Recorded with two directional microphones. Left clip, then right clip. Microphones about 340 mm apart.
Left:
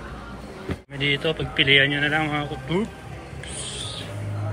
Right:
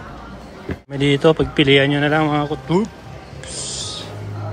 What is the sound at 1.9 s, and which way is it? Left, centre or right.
Speech, right.